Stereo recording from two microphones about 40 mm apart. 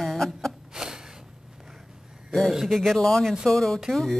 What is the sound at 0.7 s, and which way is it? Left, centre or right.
Gasp, centre.